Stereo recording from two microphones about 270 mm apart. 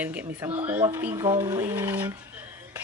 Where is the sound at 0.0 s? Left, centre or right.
Centre.